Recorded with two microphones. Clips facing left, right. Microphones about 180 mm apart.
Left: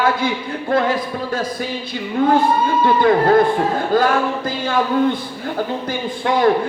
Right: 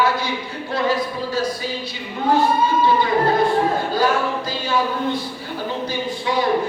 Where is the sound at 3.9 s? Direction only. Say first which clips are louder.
Left 5 dB; 55° left (ahead or behind).